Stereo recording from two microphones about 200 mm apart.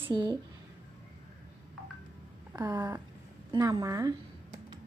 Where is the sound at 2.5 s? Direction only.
15° right (ahead or behind).